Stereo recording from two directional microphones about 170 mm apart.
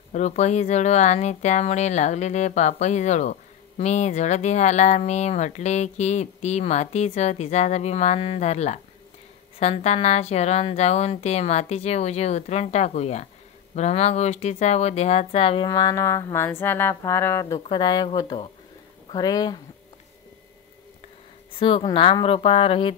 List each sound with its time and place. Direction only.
0.1 s a woman's voice: 45° left (ahead or behind); by 19.6 s 25° left (ahead or behind)
21.5 s a woman's voice: 30° left (ahead or behind)